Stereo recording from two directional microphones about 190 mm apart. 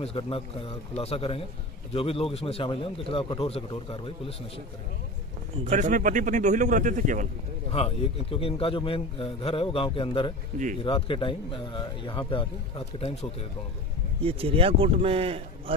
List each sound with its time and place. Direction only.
0.0 s a man's voice: 30° left (ahead or behind)
5.6 s speech: 40° right (ahead or behind)
7.7 s a man's voice: 30° left (ahead or behind)
14.2 s speech: 30° right (ahead or behind)